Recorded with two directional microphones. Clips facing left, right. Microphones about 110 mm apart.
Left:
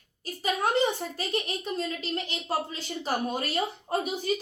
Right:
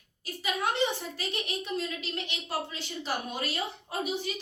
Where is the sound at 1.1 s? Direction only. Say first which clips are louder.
Left 4 dB; 40° left (ahead or behind).